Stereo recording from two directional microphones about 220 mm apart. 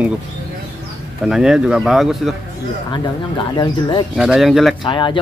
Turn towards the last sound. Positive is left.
turn(degrees=20)  # may be behind; listen again after turning